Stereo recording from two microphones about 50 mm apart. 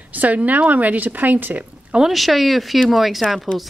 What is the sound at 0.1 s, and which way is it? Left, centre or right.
Speech, right.